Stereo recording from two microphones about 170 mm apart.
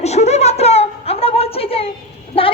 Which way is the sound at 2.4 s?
35° left (ahead or behind).